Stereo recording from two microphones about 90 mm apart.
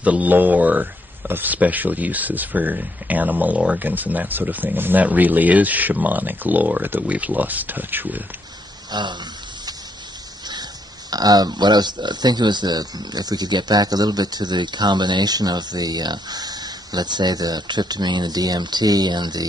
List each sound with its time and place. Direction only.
0.0 s speech: 15° right (ahead or behind)
8.9 s speech: 55° right (ahead or behind)
10.5 s speech: 50° right (ahead or behind)